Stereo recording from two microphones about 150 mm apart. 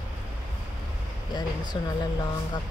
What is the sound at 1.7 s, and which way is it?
Speech, 35° left (ahead or behind).